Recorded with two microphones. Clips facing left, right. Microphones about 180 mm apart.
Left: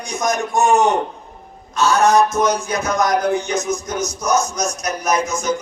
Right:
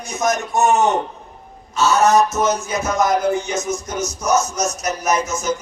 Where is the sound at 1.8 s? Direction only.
10° right (ahead or behind).